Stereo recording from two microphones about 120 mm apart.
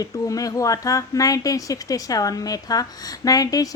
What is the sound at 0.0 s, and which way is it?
A woman's voice, 30° left (ahead or behind).